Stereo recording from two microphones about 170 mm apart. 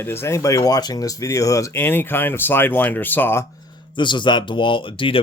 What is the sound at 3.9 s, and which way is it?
Speech, 30° left (ahead or behind).